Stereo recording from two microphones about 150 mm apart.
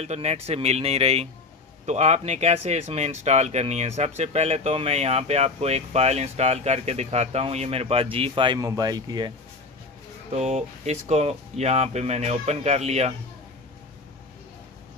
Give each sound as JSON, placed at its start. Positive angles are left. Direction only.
{"t": 0.0, "sound": "speech", "side_deg": -45}
{"t": 8.5, "sound": "speech", "side_deg": -25}
{"t": 10.3, "sound": "speech", "side_deg": -50}